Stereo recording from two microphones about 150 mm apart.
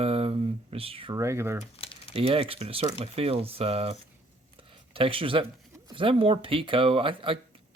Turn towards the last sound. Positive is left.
turn(degrees=-35)  # may be behind; listen again after turning